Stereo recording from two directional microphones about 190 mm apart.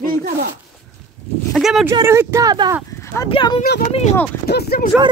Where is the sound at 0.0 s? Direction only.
50° right (ahead or behind).